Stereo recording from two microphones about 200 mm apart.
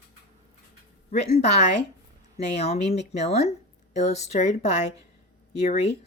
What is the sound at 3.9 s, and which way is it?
Speech, 35° left (ahead or behind).